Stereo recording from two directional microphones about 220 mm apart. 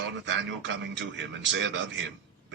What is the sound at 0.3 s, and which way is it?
A man's voice, 55° right (ahead or behind).